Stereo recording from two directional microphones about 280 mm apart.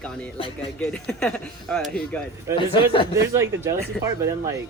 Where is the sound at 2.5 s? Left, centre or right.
Centre.